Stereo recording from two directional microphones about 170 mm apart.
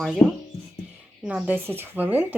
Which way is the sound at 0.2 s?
10° left (ahead or behind).